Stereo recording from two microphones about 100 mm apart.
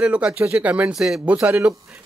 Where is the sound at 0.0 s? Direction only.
10° right (ahead or behind).